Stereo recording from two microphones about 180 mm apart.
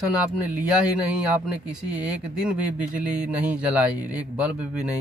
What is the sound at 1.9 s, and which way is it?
Speech, 5° right (ahead or behind).